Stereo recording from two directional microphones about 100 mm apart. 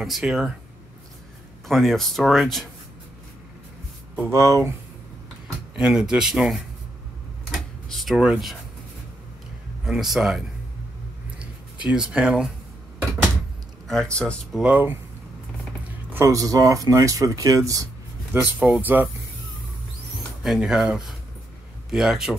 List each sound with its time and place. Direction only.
0.0 s speech: 5° right (ahead or behind)
1.7 s speech: centre (ahead or behind)
4.3 s speech: 30° right (ahead or behind)
5.8 s speech: 10° right (ahead or behind)
7.9 s speech: centre (ahead or behind)
9.8 s speech: centre (ahead or behind)
11.3 s a sound: 10° right (ahead or behind)
13.8 s speech: 10° left (ahead or behind)
14.5 s speech: 10° right (ahead or behind)
15.9 s a sound: 20° right (ahead or behind)
16.3 s speech: 35° right (ahead or behind)
18.3 s speech: 20° right (ahead or behind)
20.4 s speech: 5° right (ahead or behind)